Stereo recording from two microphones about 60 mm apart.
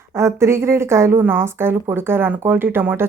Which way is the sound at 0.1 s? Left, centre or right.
Right.